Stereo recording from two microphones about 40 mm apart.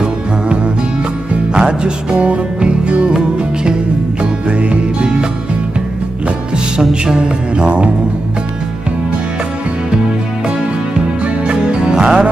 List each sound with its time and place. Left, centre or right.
1.5 s speech: right
2.6 s music: right
4.2 s music: right
6.8 s music: centre
9.8 s music: centre